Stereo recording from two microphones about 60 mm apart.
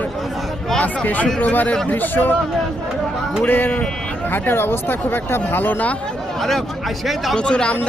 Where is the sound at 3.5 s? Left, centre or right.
Left.